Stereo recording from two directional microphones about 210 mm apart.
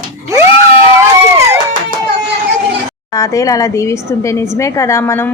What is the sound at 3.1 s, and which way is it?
A woman's voice, 15° left (ahead or behind).